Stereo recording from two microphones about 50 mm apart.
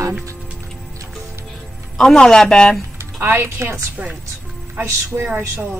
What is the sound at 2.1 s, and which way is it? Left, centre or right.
Speech, centre.